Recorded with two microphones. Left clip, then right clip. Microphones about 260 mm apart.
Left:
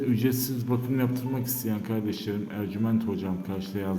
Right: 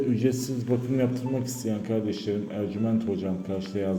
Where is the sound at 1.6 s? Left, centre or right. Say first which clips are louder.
Right 3 dB; centre.